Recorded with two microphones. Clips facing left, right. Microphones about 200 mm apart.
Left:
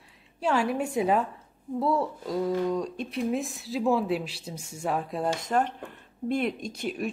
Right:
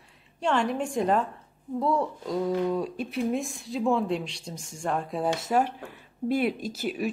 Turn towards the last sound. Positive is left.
turn(degrees=-5)  # may be behind; listen again after turning